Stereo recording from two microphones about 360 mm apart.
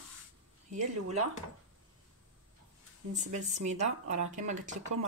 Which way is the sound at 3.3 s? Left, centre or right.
Centre.